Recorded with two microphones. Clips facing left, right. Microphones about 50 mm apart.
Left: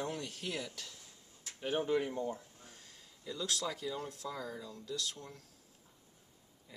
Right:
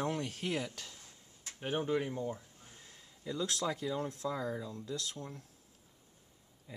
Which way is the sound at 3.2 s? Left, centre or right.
Right.